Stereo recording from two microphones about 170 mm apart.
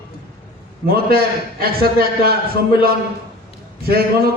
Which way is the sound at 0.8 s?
65° right (ahead or behind).